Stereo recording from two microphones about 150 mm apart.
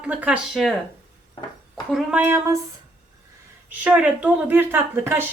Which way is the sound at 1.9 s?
10° right (ahead or behind).